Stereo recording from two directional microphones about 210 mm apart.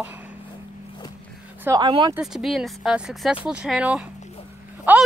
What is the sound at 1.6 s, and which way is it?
Speech, 20° right (ahead or behind).